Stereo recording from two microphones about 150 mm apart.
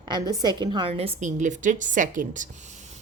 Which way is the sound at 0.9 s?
40° right (ahead or behind).